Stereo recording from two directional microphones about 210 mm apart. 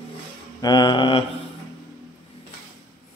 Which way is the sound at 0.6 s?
20° left (ahead or behind).